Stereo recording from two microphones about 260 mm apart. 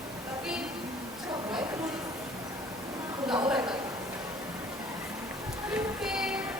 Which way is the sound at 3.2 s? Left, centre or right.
Centre.